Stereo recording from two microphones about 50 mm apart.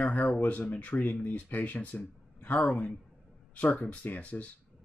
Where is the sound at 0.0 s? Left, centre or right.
Left.